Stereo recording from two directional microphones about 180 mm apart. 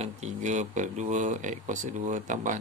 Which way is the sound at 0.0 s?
40° right (ahead or behind).